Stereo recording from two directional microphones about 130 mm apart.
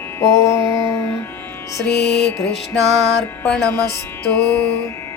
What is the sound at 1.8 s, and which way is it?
Music, 5° left (ahead or behind).